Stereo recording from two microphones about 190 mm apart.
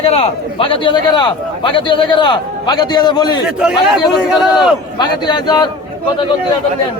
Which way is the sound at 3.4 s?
5° right (ahead or behind).